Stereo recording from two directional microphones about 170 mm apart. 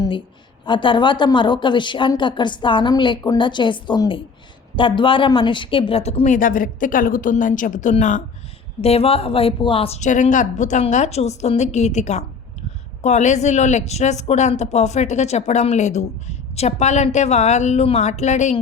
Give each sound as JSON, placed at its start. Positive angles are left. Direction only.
{"t": 0.6, "sound": "a woman's voice", "side_deg": 30}
{"t": 8.8, "sound": "a woman's voice", "side_deg": 35}